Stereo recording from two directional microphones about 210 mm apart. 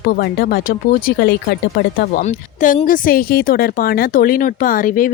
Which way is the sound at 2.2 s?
35° left (ahead or behind).